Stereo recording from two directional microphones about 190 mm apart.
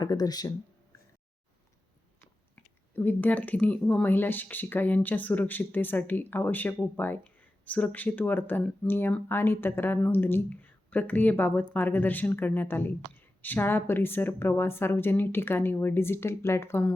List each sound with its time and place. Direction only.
0.0 s speech: 20° left (ahead or behind)
2.6 s speech: 10° left (ahead or behind)